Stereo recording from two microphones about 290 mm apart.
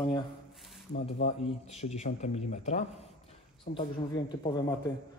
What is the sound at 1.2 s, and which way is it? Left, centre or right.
A man's voice, left.